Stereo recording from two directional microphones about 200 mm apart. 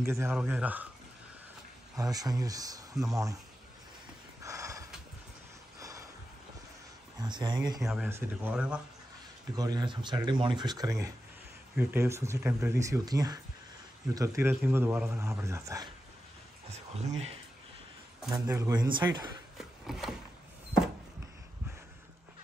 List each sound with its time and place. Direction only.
0.0 s speech: 15° right (ahead or behind)
2.0 s speech: 20° right (ahead or behind)
4.4 s a sound: 15° right (ahead or behind)
7.2 s speech: 20° right (ahead or behind)
7.8 s speech: 5° right (ahead or behind)
9.6 s speech: 20° right (ahead or behind)
16.7 s speech: 35° right (ahead or behind)
18.5 s speech: 15° right (ahead or behind)
19.6 s a sound: centre (ahead or behind)